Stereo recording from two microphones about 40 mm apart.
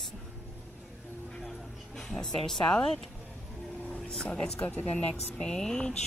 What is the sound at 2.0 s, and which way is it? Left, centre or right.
Speech, centre.